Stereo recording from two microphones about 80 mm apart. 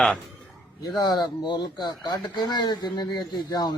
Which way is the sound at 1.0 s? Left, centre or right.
Left.